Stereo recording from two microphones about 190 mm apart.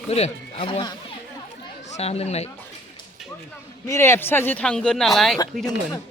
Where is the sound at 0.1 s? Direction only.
30° left (ahead or behind).